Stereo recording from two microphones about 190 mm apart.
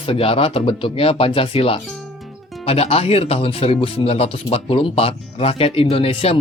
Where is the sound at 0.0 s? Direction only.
30° left (ahead or behind).